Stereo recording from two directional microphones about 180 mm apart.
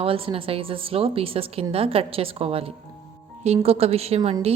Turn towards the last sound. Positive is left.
turn(degrees=-35)  # may be behind; listen again after turning